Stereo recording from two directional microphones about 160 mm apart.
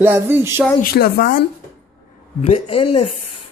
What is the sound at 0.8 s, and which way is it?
Speech, 75° left (ahead or behind).